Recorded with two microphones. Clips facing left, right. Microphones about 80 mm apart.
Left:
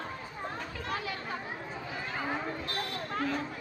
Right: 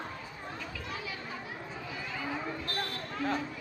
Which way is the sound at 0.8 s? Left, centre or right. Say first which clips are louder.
Left 7 dB; left.